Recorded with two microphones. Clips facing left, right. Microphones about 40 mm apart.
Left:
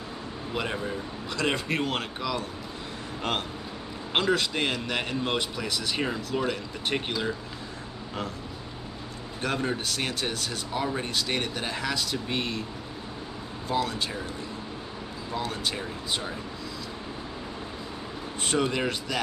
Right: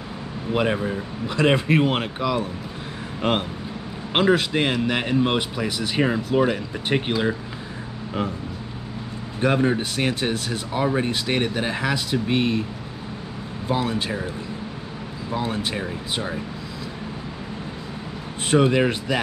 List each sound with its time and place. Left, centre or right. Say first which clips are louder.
0.5 s a man's voice: right 9 dB; right
9.4 s a man's voice: right 9 dB; centre
13.7 s a man's voice: right 4 dB; centre
15.3 s a man's voice: right 5 dB; centre
18.5 s speech: right 9 dB; centre